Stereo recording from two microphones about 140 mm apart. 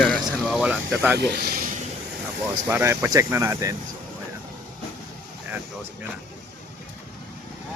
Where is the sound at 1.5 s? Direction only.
90° right.